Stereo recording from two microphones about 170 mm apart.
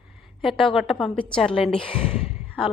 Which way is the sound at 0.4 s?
Centre (ahead or behind).